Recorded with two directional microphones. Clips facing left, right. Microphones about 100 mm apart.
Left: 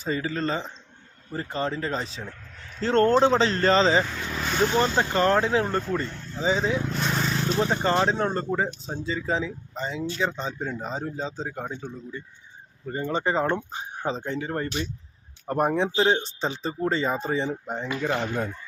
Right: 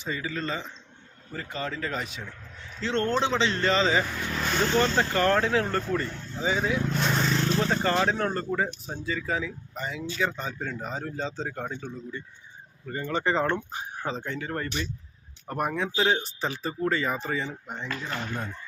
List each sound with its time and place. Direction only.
0.0 s speech: 35° left (ahead or behind)
4.3 s speech: 5° left (ahead or behind); by 6.8 s 20° left (ahead or behind)
6.9 s vehicle: centre (ahead or behind)
7.4 s speech: 15° left (ahead or behind)
12.8 s speech: 25° left (ahead or behind)